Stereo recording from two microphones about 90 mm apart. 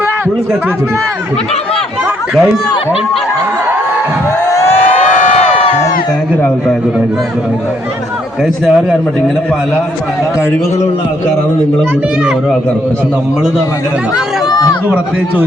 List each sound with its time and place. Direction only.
4.4 s a sound: 30° left (ahead or behind)
8.6 s a man's voice: centre (ahead or behind)
14.5 s run: 45° left (ahead or behind)